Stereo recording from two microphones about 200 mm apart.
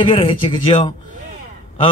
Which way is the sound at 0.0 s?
25° left (ahead or behind).